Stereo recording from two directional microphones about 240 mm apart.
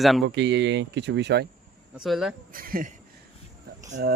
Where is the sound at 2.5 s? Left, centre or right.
Right.